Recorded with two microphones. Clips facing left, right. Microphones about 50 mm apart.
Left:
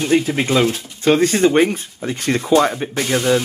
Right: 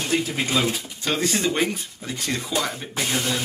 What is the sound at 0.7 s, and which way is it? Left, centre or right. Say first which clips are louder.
Speech: left 5 dB; centre.